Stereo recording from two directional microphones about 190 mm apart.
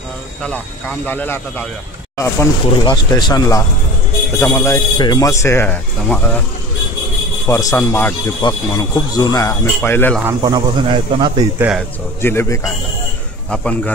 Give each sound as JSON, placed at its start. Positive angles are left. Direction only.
{"t": 0.4, "sound": "speech", "side_deg": 5}
{"t": 7.4, "sound": "speech", "side_deg": 15}
{"t": 10.2, "sound": "speech", "side_deg": -20}
{"t": 11.5, "sound": "a man's voice", "side_deg": -10}
{"t": 12.2, "sound": "speech", "side_deg": 10}